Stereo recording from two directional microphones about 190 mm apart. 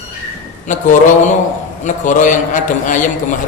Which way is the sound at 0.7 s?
40° left (ahead or behind).